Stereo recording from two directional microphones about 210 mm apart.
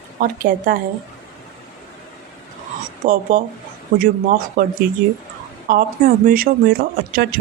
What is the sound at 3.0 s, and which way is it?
A woman's voice, 40° right (ahead or behind).